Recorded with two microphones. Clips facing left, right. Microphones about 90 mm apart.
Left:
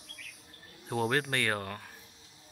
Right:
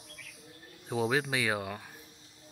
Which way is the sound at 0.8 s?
5° right (ahead or behind).